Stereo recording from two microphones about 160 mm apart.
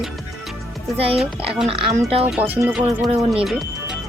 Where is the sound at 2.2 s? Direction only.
10° right (ahead or behind).